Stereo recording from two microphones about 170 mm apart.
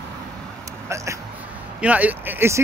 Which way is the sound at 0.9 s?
15° right (ahead or behind).